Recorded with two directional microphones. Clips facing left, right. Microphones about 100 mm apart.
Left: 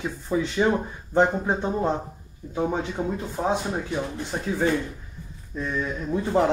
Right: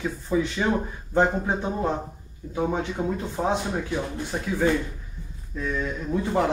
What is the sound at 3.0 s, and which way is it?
A man's voice, 5° left (ahead or behind).